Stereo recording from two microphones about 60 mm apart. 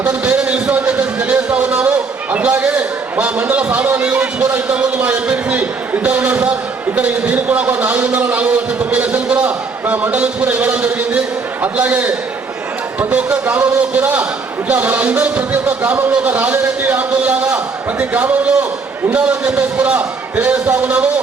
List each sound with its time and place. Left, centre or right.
0.0 s a man's voice: centre